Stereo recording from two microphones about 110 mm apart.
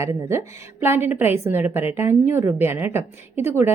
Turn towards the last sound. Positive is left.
turn(degrees=-20)  # may be behind; listen again after turning